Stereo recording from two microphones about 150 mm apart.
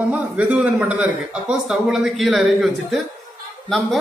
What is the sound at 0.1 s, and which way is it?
A man's voice, 10° right (ahead or behind).